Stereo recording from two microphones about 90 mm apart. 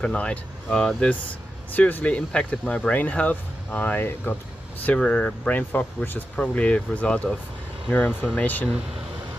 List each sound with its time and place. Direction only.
0.0 s speech: 15° left (ahead or behind)